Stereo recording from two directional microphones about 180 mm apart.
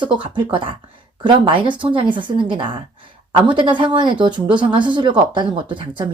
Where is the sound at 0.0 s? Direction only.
25° right (ahead or behind).